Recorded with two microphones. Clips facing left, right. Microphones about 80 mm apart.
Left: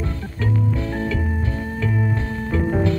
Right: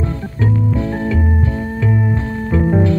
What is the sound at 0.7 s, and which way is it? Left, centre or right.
Music, centre.